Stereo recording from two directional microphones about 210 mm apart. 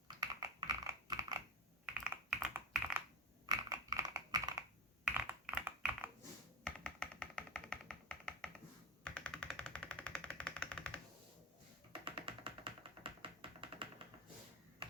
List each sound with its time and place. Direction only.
0.2 s typing: 15° right (ahead or behind)
2.0 s typing: 5° right (ahead or behind)
3.4 s a sound: 20° right (ahead or behind)
5.0 s typing: 5° right (ahead or behind)
6.7 s a sound: 5° left (ahead or behind)
9.0 s engine: 5° left (ahead or behind)
11.9 s music: 25° right (ahead or behind)